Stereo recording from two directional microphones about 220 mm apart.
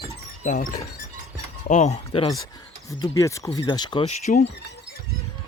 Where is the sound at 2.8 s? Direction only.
15° left (ahead or behind).